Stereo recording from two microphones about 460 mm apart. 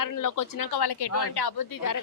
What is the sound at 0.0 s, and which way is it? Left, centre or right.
A woman's voice, left.